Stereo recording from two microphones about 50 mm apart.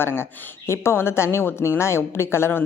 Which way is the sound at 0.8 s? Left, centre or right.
Left.